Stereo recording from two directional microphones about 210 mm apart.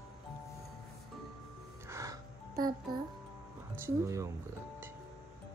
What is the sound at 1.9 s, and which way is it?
Music, 15° right (ahead or behind).